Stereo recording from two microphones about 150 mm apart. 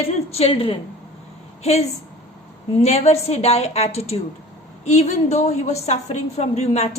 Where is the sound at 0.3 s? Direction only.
40° left (ahead or behind).